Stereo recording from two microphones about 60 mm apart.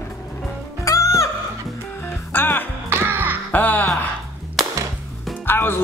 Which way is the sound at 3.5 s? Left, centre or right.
Left.